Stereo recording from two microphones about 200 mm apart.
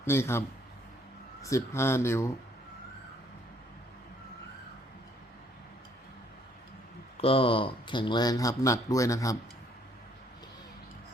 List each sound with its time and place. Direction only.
0.0 s speech: 10° left (ahead or behind)
7.2 s speech: 30° left (ahead or behind)